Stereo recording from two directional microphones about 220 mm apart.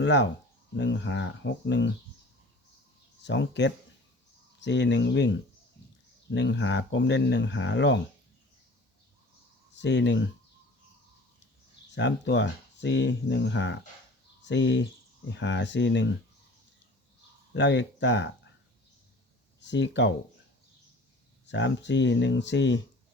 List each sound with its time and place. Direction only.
0.0 s speech: 55° left (ahead or behind)
3.2 s speech: 55° left (ahead or behind)
9.7 s speech: 55° left (ahead or behind)
11.9 s speech: 55° left (ahead or behind)
17.5 s speech: 55° left (ahead or behind)
19.6 s speech: 55° left (ahead or behind)
21.4 s speech: 55° left (ahead or behind)